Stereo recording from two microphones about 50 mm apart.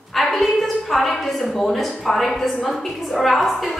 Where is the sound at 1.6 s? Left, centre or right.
Centre.